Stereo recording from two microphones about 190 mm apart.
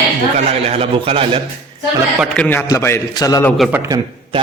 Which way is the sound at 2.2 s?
5° left (ahead or behind).